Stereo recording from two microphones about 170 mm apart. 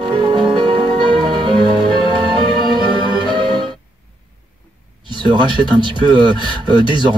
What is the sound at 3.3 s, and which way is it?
Music, 30° right (ahead or behind).